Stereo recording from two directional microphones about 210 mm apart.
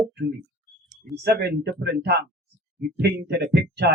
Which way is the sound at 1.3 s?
55° right (ahead or behind).